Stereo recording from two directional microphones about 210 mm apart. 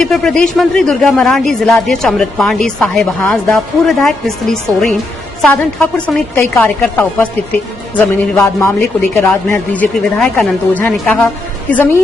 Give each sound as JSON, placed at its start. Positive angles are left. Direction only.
{"t": 0.0, "sound": "a woman's voice", "side_deg": 0}